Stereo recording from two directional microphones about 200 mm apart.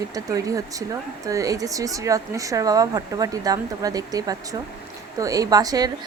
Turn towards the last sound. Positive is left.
turn(degrees=-20)  # may be behind; listen again after turning